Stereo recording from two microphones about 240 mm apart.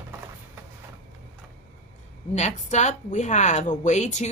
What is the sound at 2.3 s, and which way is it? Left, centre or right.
A woman's voice, left.